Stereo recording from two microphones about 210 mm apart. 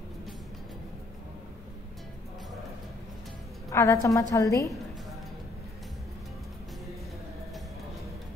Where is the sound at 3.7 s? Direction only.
15° left (ahead or behind).